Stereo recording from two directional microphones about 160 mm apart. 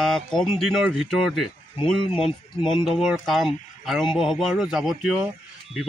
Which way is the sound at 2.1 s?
30° left (ahead or behind).